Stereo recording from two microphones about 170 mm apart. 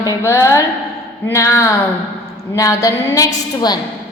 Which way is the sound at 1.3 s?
20° left (ahead or behind).